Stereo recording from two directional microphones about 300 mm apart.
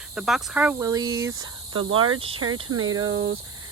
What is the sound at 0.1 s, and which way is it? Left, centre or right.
Speech, centre.